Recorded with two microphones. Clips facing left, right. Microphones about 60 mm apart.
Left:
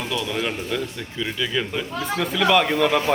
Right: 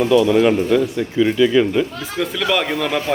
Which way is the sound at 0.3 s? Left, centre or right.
Centre.